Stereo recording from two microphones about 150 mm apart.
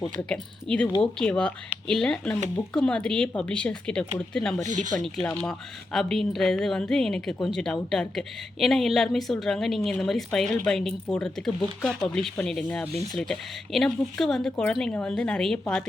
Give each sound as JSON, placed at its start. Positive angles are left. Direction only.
{"t": 0.3, "sound": "a woman's voice", "side_deg": 5}
{"t": 4.7, "sound": "speech", "side_deg": -55}
{"t": 5.2, "sound": "a woman's voice", "side_deg": 5}